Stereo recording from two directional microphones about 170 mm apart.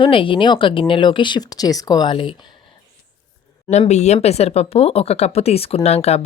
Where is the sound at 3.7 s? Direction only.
40° left (ahead or behind).